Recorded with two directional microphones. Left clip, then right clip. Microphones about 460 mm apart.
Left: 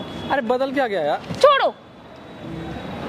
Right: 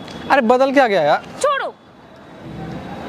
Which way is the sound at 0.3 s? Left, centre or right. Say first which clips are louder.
Right 8 dB; right.